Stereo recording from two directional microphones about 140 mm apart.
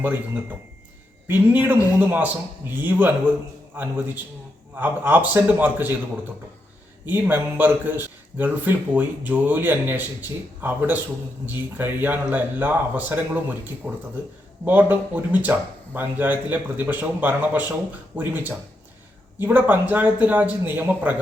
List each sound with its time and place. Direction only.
1.3 s a man's voice: 15° right (ahead or behind)
7.0 s a man's voice: 15° right (ahead or behind)